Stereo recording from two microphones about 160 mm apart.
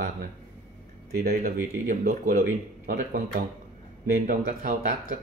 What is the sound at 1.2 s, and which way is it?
Speech, 80° right.